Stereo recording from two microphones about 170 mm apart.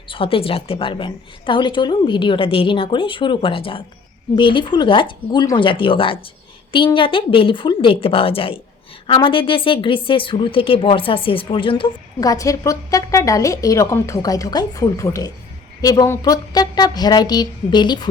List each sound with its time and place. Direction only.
0.1 s a woman's voice: 30° left (ahead or behind)